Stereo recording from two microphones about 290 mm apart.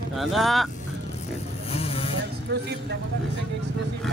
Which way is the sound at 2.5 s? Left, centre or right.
Right.